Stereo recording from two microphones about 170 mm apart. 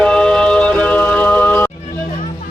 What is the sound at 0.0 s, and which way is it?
Music, 5° left (ahead or behind).